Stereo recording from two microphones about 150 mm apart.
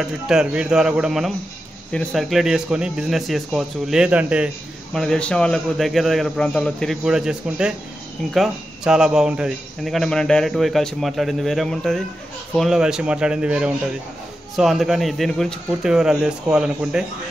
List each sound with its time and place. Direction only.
0.0 s speech: 5° right (ahead or behind)
4.9 s speech: 5° left (ahead or behind)